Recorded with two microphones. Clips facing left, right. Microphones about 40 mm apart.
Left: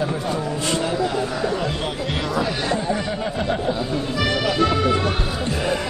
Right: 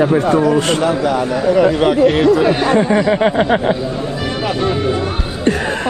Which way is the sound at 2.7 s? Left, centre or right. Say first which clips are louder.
Right 11 dB; right.